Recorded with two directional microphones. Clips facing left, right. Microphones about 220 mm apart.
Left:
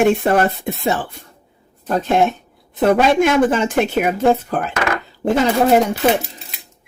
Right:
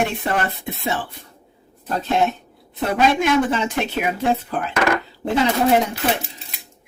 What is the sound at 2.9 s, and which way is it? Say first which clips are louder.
Speech: left 4 dB; 50° left (ahead or behind).